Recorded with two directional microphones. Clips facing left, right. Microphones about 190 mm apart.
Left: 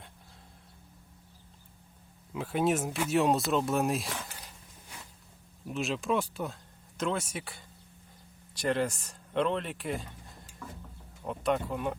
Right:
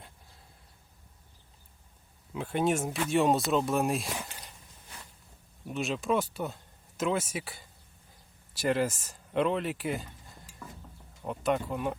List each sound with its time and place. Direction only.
2.3 s speech: centre (ahead or behind)
4.1 s speech: 15° right (ahead or behind)
5.6 s speech: centre (ahead or behind)
11.2 s speech: centre (ahead or behind)